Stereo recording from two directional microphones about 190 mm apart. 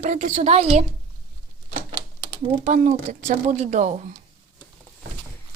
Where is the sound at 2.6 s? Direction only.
40° right (ahead or behind).